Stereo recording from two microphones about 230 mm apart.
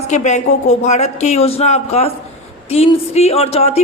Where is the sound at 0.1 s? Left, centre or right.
Left.